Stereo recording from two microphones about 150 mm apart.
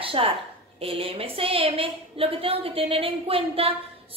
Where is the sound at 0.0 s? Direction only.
35° right (ahead or behind).